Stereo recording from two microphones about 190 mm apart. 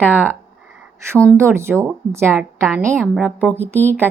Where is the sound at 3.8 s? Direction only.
10° left (ahead or behind).